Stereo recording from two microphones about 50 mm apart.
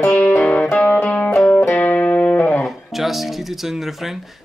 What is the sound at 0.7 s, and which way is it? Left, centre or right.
Music, left.